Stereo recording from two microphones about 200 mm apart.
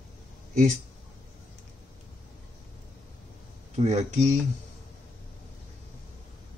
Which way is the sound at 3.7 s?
35° right (ahead or behind).